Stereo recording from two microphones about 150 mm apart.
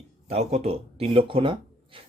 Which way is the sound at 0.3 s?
45° right (ahead or behind).